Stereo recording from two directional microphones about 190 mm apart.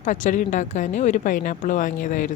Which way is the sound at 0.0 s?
40° left (ahead or behind).